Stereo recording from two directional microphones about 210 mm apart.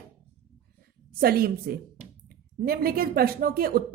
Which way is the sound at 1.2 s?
45° right (ahead or behind).